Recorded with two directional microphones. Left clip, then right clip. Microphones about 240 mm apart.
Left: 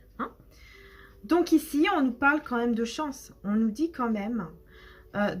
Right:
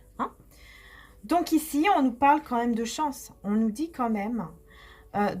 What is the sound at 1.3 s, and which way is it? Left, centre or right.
Speech, right.